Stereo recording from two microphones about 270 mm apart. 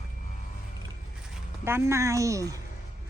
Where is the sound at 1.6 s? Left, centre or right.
Centre.